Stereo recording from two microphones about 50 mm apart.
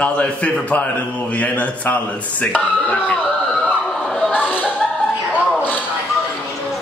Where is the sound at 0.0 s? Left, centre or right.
Left.